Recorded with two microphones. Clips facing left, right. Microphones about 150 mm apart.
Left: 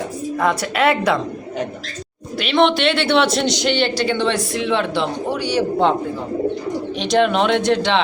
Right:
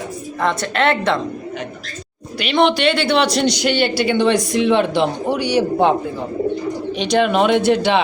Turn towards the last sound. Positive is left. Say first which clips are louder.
# right 2 dB
turn(degrees=-10)  # may be behind; listen again after turning